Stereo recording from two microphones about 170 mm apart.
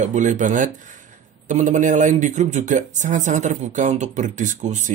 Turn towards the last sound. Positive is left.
turn(degrees=-45)  # may be behind; listen again after turning